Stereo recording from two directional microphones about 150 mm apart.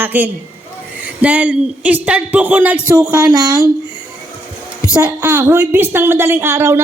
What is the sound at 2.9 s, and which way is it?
Speech, 25° right (ahead or behind).